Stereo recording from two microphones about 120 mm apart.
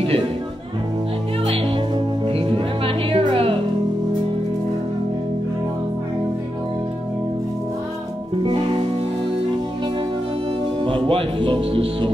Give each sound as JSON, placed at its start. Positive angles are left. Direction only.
{"t": 2.2, "sound": "music", "side_deg": -50}
{"t": 10.8, "sound": "speech", "side_deg": -45}